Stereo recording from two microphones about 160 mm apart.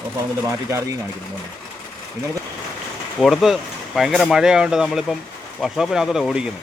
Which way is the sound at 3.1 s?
Centre (ahead or behind).